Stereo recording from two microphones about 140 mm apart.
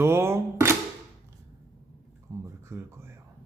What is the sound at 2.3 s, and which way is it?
Speech, 25° right (ahead or behind).